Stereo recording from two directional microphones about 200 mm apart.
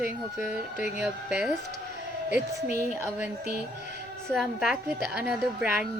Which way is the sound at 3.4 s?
50° right (ahead or behind).